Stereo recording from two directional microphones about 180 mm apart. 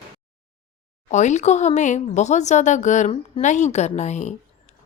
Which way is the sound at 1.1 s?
40° left (ahead or behind).